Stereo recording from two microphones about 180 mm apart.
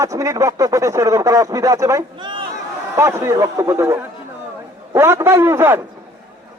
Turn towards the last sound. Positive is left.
turn(degrees=-15)  # may be behind; listen again after turning